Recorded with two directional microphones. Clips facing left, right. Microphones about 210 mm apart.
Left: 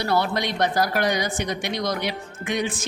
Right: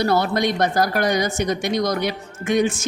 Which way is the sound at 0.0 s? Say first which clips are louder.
Right 4 dB; 45° right (ahead or behind).